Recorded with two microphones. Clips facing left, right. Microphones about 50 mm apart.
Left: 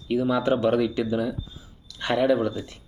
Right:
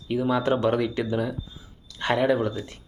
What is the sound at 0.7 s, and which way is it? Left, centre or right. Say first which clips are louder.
Speech: left 2 dB; right.